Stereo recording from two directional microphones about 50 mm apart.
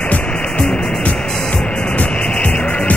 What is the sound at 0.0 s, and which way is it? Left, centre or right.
Music, left.